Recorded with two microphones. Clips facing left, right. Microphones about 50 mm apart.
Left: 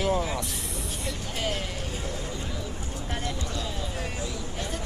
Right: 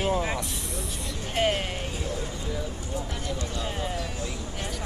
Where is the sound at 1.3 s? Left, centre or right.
Right.